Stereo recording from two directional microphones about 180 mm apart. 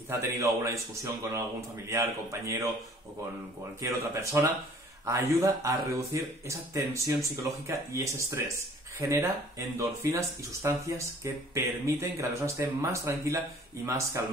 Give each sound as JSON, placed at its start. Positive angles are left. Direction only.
{"t": 0.4, "sound": "speech", "side_deg": -15}
{"t": 3.8, "sound": "speech", "side_deg": -15}